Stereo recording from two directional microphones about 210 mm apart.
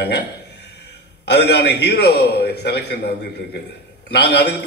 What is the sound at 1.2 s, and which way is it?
A man's voice, 55° left (ahead or behind).